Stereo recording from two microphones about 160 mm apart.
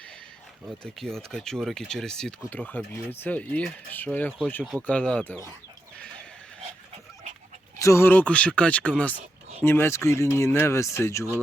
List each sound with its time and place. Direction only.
0.9 s speech: 5° left (ahead or behind)
7.8 s speech: 20° left (ahead or behind)